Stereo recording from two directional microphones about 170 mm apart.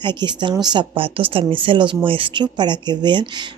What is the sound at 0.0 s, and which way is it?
A woman's voice, 25° right (ahead or behind).